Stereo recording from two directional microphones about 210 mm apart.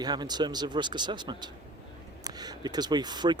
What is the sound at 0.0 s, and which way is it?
Speech, 20° right (ahead or behind).